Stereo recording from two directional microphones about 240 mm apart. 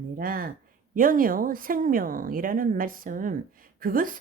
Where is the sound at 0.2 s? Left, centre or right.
Right.